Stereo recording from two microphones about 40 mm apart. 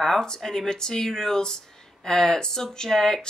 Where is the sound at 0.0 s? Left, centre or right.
Centre.